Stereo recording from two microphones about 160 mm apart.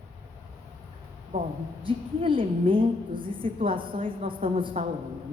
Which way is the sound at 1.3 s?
45° right (ahead or behind).